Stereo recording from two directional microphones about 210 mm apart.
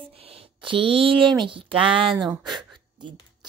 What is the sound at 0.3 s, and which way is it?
Speech, 25° right (ahead or behind).